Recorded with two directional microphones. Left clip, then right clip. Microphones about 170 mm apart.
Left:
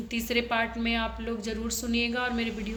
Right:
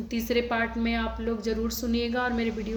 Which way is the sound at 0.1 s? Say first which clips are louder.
Right 1 dB; 35° right (ahead or behind).